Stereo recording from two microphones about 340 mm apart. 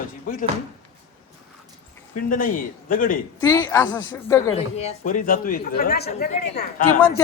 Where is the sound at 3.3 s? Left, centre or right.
Centre.